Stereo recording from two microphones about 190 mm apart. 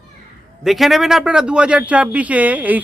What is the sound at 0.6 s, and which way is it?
A man's voice, centre (ahead or behind).